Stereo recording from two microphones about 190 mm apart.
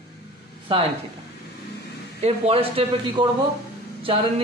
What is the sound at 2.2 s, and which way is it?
A woman's voice, 30° right (ahead or behind).